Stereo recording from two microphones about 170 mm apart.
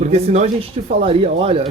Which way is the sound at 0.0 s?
40° right (ahead or behind).